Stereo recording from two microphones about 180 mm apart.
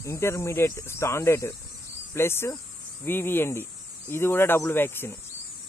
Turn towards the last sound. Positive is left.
turn(degrees=10)  # may be behind; listen again after turning